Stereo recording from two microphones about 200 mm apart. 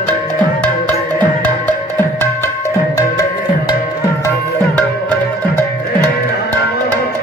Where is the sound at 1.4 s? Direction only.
10° left (ahead or behind).